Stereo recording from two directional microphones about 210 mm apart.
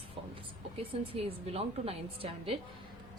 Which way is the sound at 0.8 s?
25° right (ahead or behind).